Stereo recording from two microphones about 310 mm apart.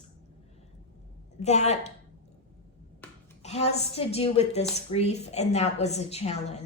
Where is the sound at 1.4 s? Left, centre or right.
Left.